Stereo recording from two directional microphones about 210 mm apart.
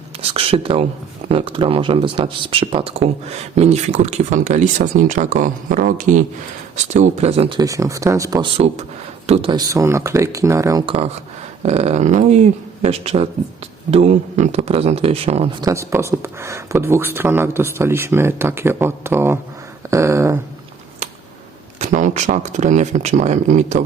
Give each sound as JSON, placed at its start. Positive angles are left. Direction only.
{"t": 0.2, "sound": "speech", "side_deg": -25}
{"t": 7.6, "sound": "speech", "side_deg": -15}
{"t": 9.2, "sound": "speech", "side_deg": -25}
{"t": 15.6, "sound": "speech", "side_deg": -15}
{"t": 21.8, "sound": "speech", "side_deg": -35}